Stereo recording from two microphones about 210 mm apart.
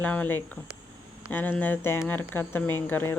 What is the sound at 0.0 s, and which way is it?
Speech, 5° left (ahead or behind).